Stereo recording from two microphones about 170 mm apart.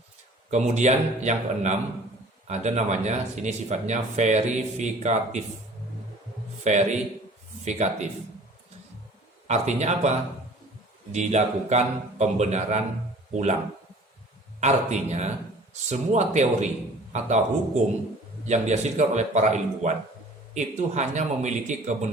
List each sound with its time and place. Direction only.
0.5 s a man's voice: 40° right (ahead or behind)
6.7 s a man's voice: 40° right (ahead or behind)
9.5 s a man's voice: 40° right (ahead or behind)
14.6 s a man's voice: 40° right (ahead or behind)